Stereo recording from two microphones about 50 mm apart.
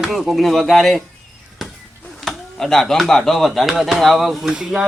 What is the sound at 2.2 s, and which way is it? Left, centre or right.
Speech, centre.